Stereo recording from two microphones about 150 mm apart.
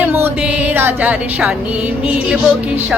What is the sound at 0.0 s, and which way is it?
Music, 15° right (ahead or behind).